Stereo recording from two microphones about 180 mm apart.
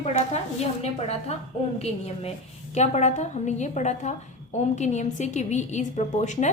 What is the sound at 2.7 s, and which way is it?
A woman's voice, 40° left (ahead or behind).